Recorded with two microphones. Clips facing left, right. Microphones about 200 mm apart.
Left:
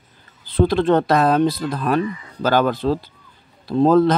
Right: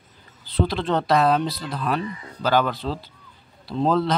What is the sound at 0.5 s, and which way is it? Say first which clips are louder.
Speech: left 7 dB; 50° left (ahead or behind).